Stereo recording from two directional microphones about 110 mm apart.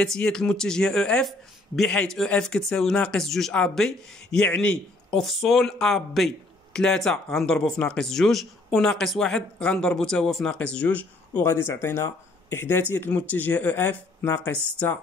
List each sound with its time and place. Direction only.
0.0 s speech: 5° left (ahead or behind)
11.5 s speech: 25° left (ahead or behind)